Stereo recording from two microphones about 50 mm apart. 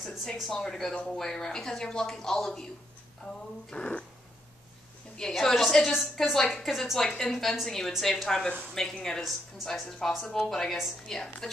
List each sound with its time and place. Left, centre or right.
0.3 s speech: centre
3.7 s speech: left
5.3 s a woman's voice: centre